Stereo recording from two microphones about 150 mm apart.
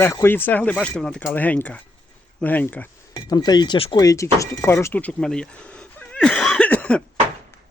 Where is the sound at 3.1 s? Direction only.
25° left (ahead or behind).